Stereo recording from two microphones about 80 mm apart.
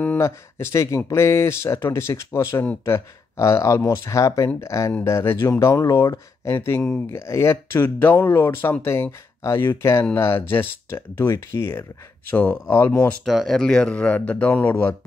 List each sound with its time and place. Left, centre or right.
0.2 s speech: left
12.3 s speech: left
13.2 s speech: centre; by 15.0 s left